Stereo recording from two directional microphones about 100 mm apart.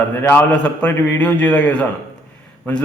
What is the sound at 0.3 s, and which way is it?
A man's voice, 10° left (ahead or behind).